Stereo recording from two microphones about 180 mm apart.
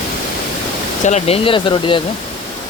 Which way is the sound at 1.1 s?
35° left (ahead or behind).